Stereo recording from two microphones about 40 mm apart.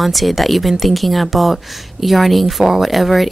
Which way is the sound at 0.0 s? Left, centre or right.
Centre.